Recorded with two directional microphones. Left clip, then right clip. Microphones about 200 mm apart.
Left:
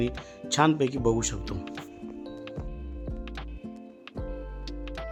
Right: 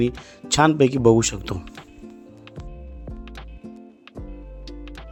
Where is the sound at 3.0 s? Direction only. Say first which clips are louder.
Left 1 dB; centre (ahead or behind).